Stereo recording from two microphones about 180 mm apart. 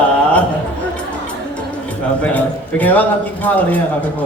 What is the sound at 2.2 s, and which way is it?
A man's voice, 10° left (ahead or behind).